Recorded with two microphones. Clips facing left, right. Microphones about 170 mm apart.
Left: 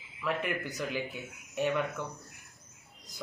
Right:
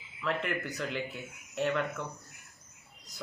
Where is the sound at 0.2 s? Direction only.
5° left (ahead or behind).